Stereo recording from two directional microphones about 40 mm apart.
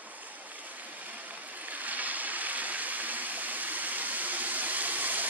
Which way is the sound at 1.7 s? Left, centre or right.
Right.